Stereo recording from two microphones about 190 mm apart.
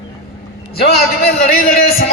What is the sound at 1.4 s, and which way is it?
Speech, 50° left (ahead or behind).